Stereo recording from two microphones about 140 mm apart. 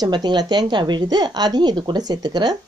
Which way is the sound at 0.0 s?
30° right (ahead or behind).